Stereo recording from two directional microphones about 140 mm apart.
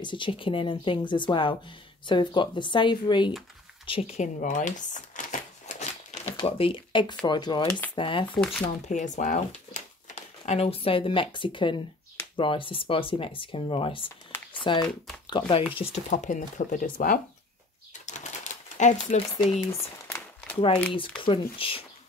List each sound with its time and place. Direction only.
0.0 s speech: 35° left (ahead or behind)
3.8 s typewriter: 45° left (ahead or behind)
6.4 s speech: 40° left (ahead or behind)
8.8 s speech: 60° left (ahead or behind); by 15.6 s 35° left (ahead or behind)
15.7 s speech: 45° left (ahead or behind)
16.1 s speech: 65° left (ahead or behind); by 17.2 s 90° left
18.0 s typewriter: 60° left (ahead or behind)
19.6 s crumpling: 20° left (ahead or behind)
21.2 s speech: 40° left (ahead or behind)